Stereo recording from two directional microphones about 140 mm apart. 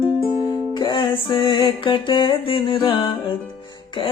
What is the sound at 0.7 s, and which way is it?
Music, 30° left (ahead or behind).